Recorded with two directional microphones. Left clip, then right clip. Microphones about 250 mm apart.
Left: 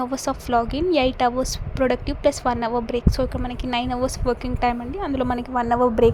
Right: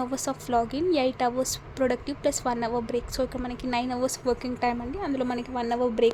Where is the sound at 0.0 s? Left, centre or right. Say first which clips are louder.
Left 5 dB; centre.